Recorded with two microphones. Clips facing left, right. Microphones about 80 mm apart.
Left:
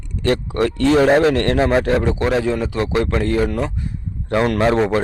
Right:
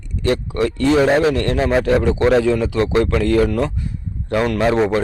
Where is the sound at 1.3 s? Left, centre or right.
Left.